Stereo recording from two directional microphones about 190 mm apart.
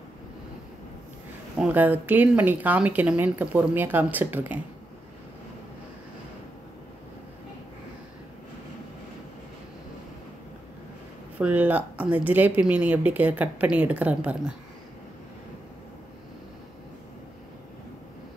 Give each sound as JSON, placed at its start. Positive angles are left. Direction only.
{"t": 1.6, "sound": "speech", "side_deg": -10}
{"t": 11.3, "sound": "speech", "side_deg": -10}